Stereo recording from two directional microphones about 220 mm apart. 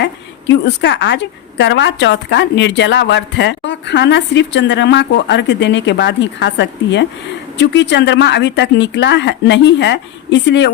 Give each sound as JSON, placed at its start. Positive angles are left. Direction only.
{"t": 0.0, "sound": "a woman's voice", "side_deg": 55}